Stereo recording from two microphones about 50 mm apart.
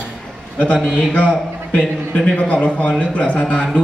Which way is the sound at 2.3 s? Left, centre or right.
Left.